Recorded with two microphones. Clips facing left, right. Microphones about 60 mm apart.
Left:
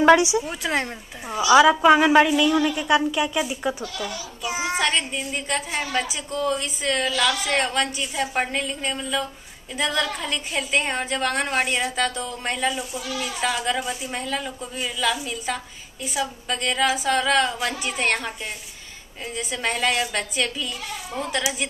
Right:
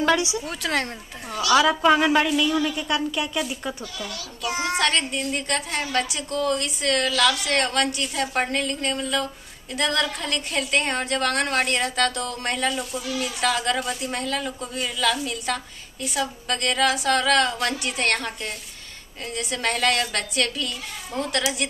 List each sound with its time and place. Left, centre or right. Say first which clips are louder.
0.0 s a woman's voice: left 6 dB; left; by 21.6 s centre